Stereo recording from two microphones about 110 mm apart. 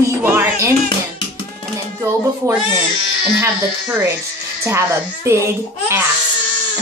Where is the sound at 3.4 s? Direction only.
25° right (ahead or behind).